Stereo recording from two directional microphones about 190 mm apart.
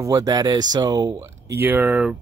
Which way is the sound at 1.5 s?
10° right (ahead or behind).